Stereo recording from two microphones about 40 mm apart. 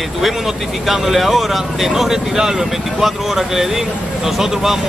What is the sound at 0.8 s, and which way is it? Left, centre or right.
Speech, centre.